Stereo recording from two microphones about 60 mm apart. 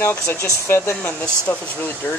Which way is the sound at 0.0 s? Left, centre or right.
Left.